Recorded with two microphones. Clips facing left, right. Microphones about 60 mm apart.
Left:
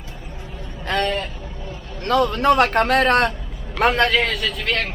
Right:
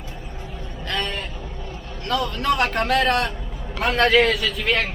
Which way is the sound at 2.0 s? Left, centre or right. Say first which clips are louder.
Left 6 dB; left.